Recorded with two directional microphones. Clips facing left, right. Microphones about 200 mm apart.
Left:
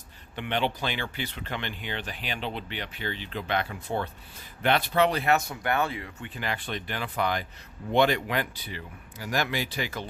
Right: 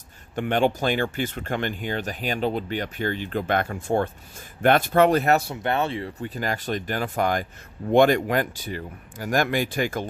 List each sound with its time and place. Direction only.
0.3 s speech: 45° right (ahead or behind)
5.4 s speech: 25° right (ahead or behind); by 10.1 s 50° right (ahead or behind)